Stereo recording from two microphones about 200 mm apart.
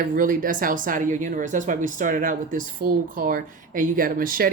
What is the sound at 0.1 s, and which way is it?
Speech, 45° right (ahead or behind).